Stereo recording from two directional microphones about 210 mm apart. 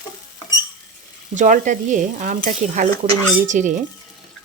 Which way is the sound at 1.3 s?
35° right (ahead or behind).